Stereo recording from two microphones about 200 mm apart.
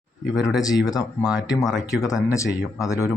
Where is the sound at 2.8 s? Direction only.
15° left (ahead or behind).